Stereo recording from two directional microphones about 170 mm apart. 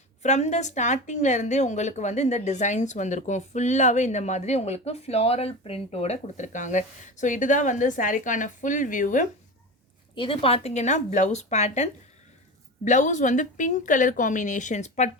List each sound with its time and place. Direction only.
0.2 s a woman's voice: 40° left (ahead or behind)
10.2 s a woman's voice: 35° left (ahead or behind)